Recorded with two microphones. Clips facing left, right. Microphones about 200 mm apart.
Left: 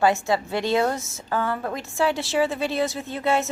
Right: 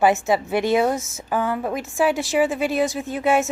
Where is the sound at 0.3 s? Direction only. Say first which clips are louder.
Right 3 dB; 20° right (ahead or behind).